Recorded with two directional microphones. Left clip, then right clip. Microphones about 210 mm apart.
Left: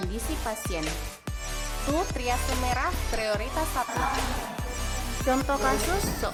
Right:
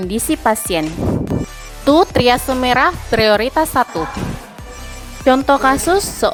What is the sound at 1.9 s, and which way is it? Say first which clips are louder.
Speech: right 17 dB; 35° right (ahead or behind).